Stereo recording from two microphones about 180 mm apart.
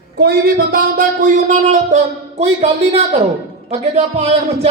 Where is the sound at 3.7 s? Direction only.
35° right (ahead or behind).